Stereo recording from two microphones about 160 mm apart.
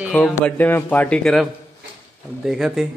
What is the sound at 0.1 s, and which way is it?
A man's voice, 10° left (ahead or behind).